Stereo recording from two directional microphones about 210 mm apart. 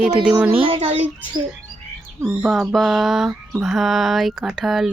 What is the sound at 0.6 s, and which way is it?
Speech, 25° right (ahead or behind).